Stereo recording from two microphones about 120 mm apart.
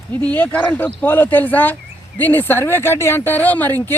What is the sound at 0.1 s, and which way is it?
Speech, 15° left (ahead or behind).